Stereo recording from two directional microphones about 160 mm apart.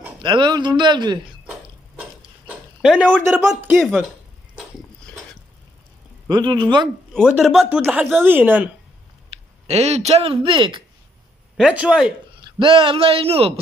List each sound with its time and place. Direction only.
0.2 s a man's voice: 30° right (ahead or behind)
1.5 s a sound: 5° right (ahead or behind)
3.7 s speech: centre (ahead or behind)
5.1 s a sound: 10° left (ahead or behind)
6.2 s a man's voice: 25° right (ahead or behind)
7.1 s speech: centre (ahead or behind)
9.7 s speech: 40° right (ahead or behind)
11.5 s speech: 5° right (ahead or behind)
12.4 s a man's voice: 30° right (ahead or behind)